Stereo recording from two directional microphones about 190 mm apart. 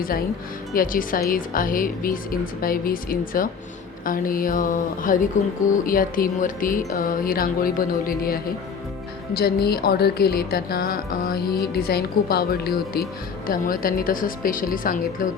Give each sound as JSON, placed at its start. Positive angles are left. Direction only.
{"t": 0.7, "sound": "speech", "side_deg": 45}